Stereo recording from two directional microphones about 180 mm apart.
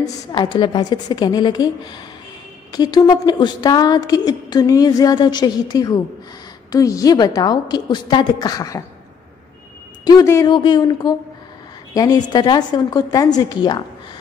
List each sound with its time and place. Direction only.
0.0 s speech: 25° left (ahead or behind)
10.0 s speech: 20° left (ahead or behind)